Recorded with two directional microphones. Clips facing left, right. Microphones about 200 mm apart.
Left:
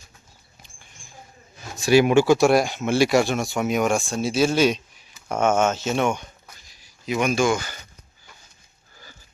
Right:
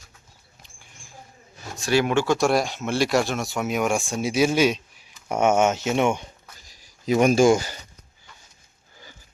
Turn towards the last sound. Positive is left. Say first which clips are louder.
# right 4 dB
turn(degrees=-35)  # may be behind; listen again after turning